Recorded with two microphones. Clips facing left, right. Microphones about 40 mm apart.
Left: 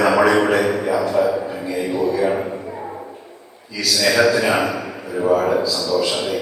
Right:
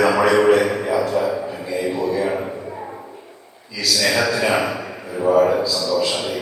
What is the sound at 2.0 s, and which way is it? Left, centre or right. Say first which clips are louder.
Speech: left 4 dB; left.